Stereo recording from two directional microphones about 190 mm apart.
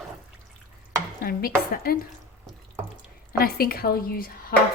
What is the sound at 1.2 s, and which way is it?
Speech, 50° left (ahead or behind).